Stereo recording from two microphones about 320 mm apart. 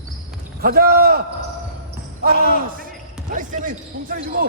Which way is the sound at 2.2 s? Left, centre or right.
Right.